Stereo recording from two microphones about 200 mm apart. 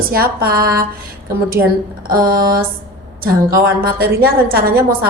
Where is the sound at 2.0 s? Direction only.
45° right (ahead or behind).